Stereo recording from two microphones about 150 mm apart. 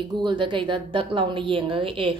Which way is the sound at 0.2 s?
30° right (ahead or behind).